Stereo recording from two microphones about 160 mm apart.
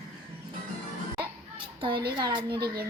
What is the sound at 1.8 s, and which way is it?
Speech, 30° right (ahead or behind).